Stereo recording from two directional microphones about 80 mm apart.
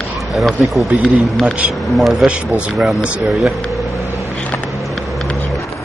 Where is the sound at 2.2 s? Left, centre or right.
Centre.